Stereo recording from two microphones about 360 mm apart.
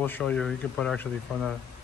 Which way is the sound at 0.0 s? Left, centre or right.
Centre.